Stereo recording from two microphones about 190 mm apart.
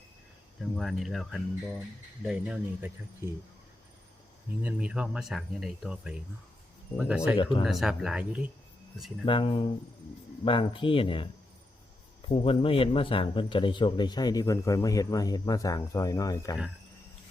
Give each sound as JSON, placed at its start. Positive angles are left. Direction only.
{"t": 0.6, "sound": "speech", "side_deg": 0}
{"t": 4.6, "sound": "speech", "side_deg": -5}
{"t": 9.2, "sound": "speech", "side_deg": 25}
{"t": 12.3, "sound": "speech", "side_deg": 30}